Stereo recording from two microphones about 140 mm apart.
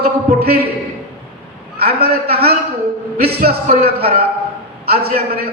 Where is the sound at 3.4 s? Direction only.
90° right.